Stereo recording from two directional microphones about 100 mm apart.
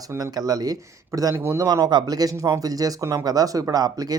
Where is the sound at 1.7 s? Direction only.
40° right (ahead or behind).